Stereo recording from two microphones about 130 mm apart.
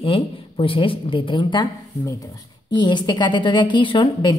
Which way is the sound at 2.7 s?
35° left (ahead or behind).